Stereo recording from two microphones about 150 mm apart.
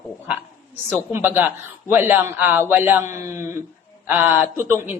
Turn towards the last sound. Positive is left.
turn(degrees=-15)  # may be behind; listen again after turning